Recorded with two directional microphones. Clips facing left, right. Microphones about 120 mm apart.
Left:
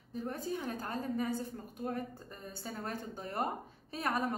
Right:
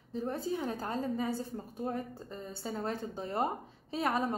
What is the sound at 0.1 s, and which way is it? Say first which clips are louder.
A woman's voice: right 3 dB; 30° right (ahead or behind).